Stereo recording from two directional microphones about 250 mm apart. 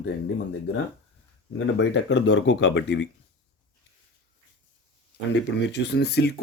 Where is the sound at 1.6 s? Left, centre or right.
Left.